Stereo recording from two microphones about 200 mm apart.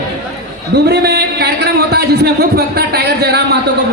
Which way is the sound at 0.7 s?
55° right (ahead or behind).